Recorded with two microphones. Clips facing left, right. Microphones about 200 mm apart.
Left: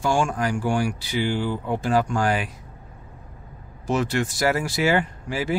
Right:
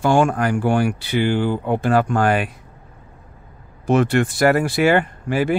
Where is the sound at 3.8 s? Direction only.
60° right (ahead or behind).